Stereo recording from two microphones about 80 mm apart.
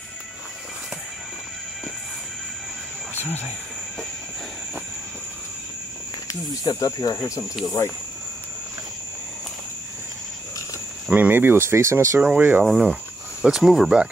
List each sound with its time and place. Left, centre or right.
3.2 s speech: left
6.2 s speech: left
11.1 s speech: right
12.2 s speech: right
12.6 s speech: centre